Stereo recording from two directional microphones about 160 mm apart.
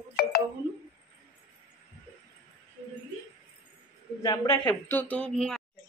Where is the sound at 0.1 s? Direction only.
75° left (ahead or behind).